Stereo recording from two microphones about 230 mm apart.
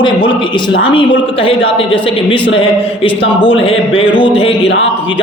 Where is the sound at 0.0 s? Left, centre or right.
Left.